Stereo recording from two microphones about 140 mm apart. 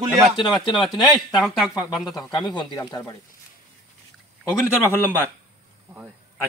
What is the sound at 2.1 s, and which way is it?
Speech, 30° left (ahead or behind).